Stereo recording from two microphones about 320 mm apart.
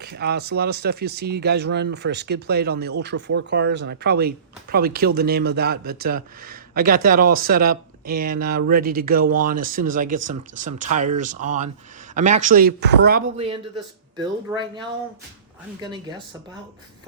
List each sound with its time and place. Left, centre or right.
0.0 s speech: right
13.3 s speech: centre